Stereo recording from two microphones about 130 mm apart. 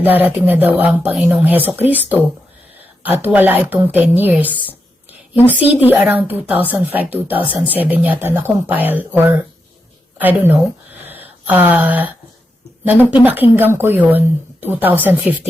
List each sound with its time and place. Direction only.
0.0 s a woman's voice: 15° right (ahead or behind)
11.0 s a sound: 15° right (ahead or behind)
12.9 s a woman's voice: 15° right (ahead or behind)